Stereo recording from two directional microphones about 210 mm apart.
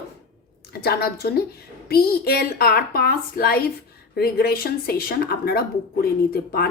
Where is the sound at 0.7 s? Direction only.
50° left (ahead or behind).